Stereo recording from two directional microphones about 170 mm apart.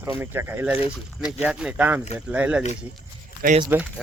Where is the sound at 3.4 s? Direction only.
60° right (ahead or behind).